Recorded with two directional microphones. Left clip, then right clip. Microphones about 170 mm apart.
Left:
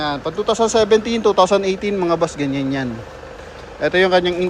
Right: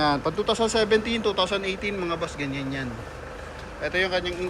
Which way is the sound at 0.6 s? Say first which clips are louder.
Left 10 dB; 35° left (ahead or behind).